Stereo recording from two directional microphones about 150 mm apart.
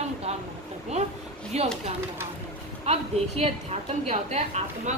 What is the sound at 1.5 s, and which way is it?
Speech, 45° right (ahead or behind).